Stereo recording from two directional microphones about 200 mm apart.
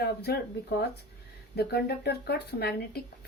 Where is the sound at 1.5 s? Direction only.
50° left (ahead or behind).